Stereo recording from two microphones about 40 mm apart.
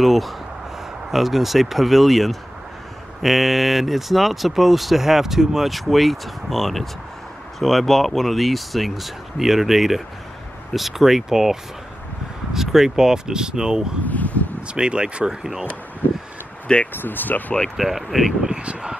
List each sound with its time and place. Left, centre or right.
0.0 s speech: centre
12.5 s speech: centre
14.1 s a sound: left
14.7 s speech: right
16.6 s speech: left
16.9 s speech: left
17.7 s speech: centre
18.5 s speech: right